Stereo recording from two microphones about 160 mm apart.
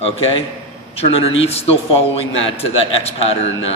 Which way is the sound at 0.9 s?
35° left (ahead or behind).